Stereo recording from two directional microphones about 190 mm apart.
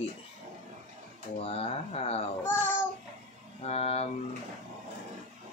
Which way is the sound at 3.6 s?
35° left (ahead or behind).